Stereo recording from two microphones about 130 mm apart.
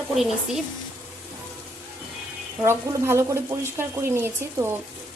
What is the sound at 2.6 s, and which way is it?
Speech, 20° right (ahead or behind).